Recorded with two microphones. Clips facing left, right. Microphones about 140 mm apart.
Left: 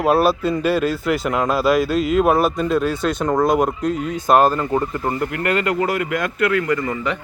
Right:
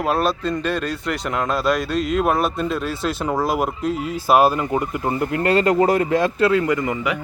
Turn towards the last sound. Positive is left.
turn(degrees=-20)  # may be behind; listen again after turning